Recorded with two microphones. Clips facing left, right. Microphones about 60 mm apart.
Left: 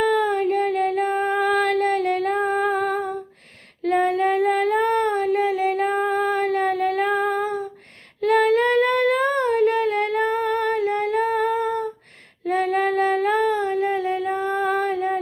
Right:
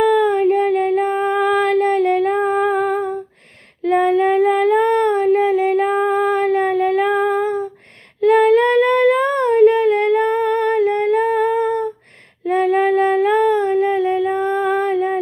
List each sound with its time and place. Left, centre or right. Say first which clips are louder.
0.0 s female singing: right 6 dB; right
2.4 s female singing: right 4 dB; right
3.8 s female singing: right 5 dB; right
8.2 s a sound: right 5 dB; right
12.5 s female singing: right 5 dB; right
13.3 s a sound: right 6 dB; right